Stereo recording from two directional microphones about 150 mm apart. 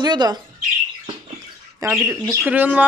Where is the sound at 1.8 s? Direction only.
20° right (ahead or behind).